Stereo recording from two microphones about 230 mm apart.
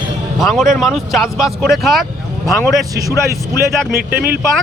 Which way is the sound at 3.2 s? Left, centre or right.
Right.